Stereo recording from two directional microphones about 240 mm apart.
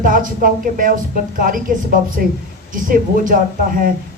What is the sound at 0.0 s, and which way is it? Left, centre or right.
Speech, right.